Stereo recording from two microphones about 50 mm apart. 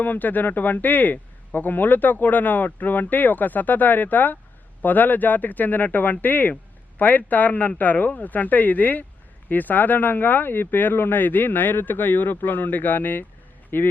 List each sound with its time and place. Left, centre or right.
0.0 s speech: left